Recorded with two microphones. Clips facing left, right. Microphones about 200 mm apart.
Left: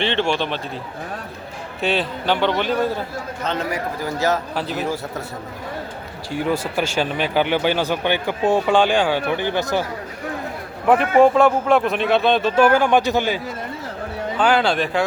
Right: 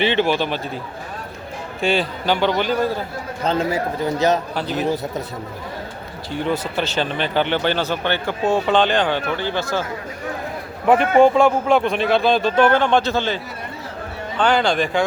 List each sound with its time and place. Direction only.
0.0 s speech: 5° right (ahead or behind)
1.8 s speech: centre (ahead or behind)
3.4 s a man's voice: 30° right (ahead or behind)
4.5 s speech: centre (ahead or behind)
4.8 s a man's voice: 20° right (ahead or behind)
6.3 s speech: 5° left (ahead or behind)
10.8 s speech: centre (ahead or behind)